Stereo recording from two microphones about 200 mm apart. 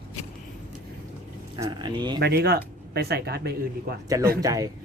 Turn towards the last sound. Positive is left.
turn(degrees=-15)  # may be behind; listen again after turning